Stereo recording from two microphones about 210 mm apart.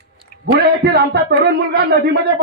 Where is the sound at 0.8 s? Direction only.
50° right (ahead or behind).